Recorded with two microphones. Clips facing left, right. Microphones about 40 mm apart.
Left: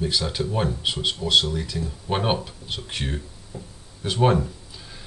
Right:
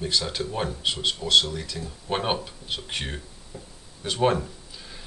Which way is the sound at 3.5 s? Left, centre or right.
Centre.